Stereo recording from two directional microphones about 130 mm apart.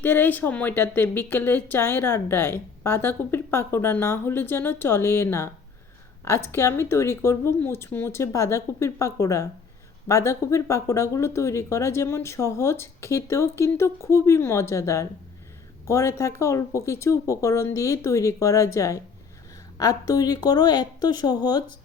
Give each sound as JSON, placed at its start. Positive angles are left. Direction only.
{"t": 0.0, "sound": "speech", "side_deg": 15}